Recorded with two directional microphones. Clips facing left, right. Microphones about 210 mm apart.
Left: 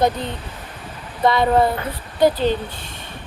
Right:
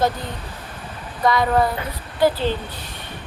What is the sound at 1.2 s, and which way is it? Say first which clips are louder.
Speech: left 2 dB; 25° left (ahead or behind).